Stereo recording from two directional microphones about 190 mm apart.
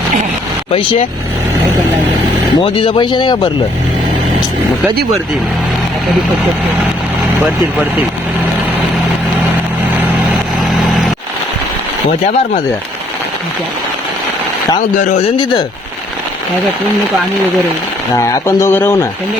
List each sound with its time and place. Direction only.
0.7 s speech: 30° left (ahead or behind)
2.6 s speech: 25° left (ahead or behind)
7.4 s speech: 5° right (ahead or behind)
14.9 s speech: 45° left (ahead or behind)
18.2 s speech: 15° left (ahead or behind)